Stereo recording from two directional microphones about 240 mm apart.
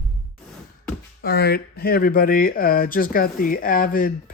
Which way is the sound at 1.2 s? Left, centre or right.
Left.